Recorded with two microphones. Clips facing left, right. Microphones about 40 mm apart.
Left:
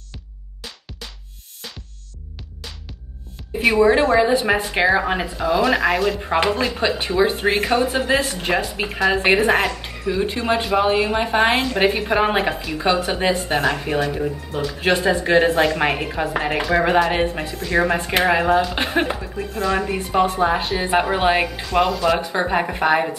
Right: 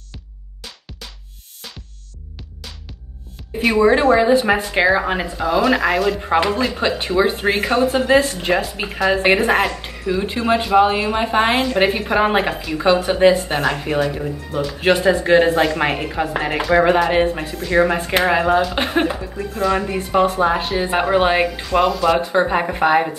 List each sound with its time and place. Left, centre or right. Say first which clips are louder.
3.6 s speech: right 1 dB; centre